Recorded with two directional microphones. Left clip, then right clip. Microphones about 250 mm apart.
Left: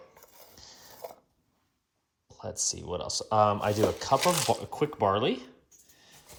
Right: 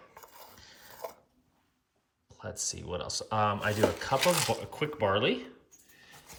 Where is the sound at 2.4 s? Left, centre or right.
Centre.